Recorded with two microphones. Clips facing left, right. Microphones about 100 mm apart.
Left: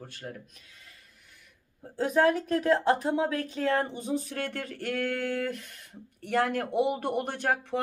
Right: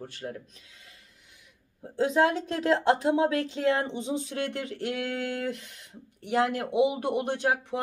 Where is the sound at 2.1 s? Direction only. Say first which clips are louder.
Left 3 dB; 25° right (ahead or behind).